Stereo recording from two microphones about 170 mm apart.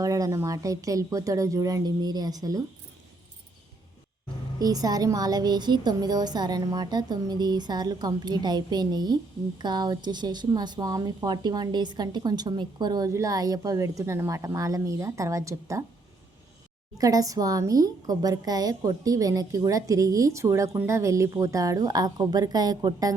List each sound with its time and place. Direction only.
0.0 s a woman's voice: 20° right (ahead or behind)
4.6 s a woman's voice: 20° right (ahead or behind)
17.0 s a woman's voice: 20° right (ahead or behind)